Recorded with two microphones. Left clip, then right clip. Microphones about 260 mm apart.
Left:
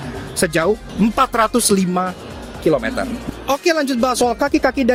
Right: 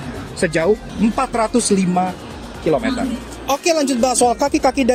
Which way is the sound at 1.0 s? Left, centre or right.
Left.